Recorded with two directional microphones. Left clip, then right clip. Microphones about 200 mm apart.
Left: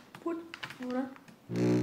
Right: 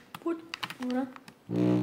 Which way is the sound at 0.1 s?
40° right (ahead or behind).